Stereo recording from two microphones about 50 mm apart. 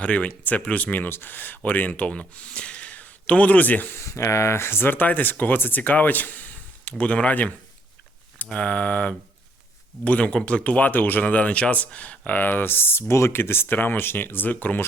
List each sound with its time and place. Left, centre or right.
0.0 s speech: left
3.9 s speech: left